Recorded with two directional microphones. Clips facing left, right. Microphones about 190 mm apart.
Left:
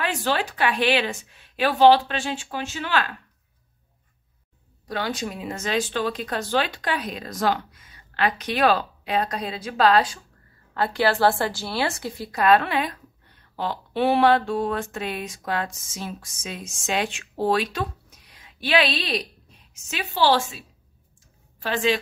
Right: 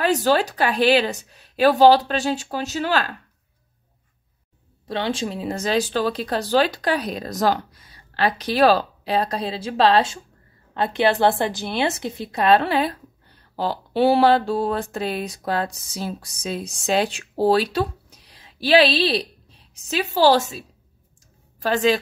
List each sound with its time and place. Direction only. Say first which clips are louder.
0.0 s a woman's voice: right 6 dB; 40° right (ahead or behind)
4.8 s a woman's voice: right 3 dB; 25° right (ahead or behind); by 22.0 s 40° right (ahead or behind)